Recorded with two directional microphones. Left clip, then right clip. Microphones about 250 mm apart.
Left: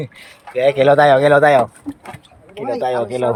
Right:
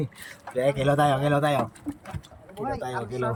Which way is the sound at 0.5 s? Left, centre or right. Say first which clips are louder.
Left 11 dB; centre.